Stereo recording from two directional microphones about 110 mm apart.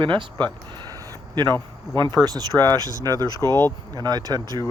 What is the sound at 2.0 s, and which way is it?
Speech, 25° left (ahead or behind).